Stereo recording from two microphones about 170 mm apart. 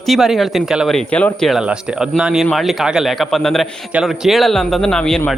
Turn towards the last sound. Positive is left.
turn(degrees=5)  # may be behind; listen again after turning